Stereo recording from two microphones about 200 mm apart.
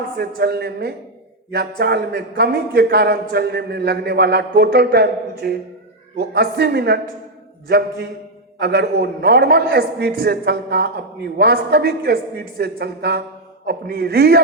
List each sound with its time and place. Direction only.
0.2 s a man's voice: 50° right (ahead or behind)